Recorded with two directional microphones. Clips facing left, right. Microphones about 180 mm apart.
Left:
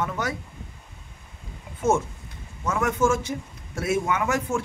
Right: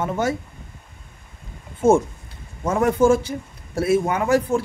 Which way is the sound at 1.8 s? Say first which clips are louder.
Right 7 dB; 30° right (ahead or behind).